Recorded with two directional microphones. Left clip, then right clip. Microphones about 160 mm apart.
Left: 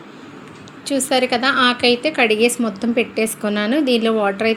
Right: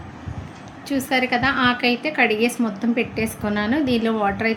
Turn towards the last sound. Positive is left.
turn(degrees=10)  # may be behind; listen again after turning